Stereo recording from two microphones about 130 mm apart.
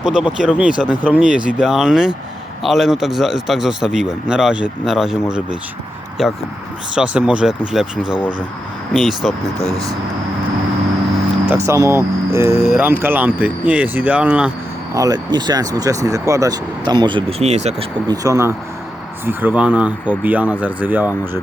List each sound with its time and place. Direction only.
0.0 s speech: 5° right (ahead or behind)
11.4 s speech: 20° right (ahead or behind)
14.9 s speech: 30° right (ahead or behind)
17.4 s speech: 55° right (ahead or behind)
18.1 s speech: 25° right (ahead or behind)